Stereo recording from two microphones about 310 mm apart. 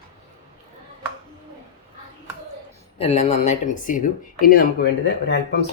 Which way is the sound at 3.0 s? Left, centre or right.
Centre.